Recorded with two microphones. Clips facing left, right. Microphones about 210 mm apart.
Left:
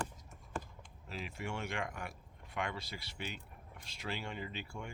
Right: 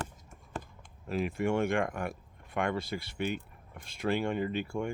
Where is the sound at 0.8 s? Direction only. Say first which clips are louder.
Right 13 dB; 55° right (ahead or behind).